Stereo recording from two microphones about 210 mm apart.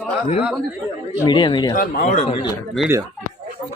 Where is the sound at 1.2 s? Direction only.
20° left (ahead or behind).